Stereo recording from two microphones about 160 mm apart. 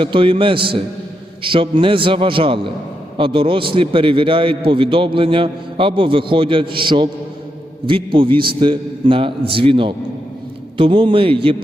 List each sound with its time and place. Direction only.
0.0 s a man's voice: 30° right (ahead or behind)